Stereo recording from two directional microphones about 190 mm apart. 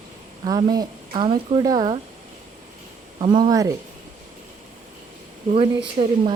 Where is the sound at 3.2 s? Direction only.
25° right (ahead or behind).